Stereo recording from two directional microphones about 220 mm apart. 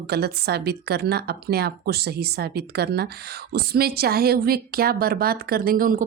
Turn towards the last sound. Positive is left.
turn(degrees=-40)  # may be behind; listen again after turning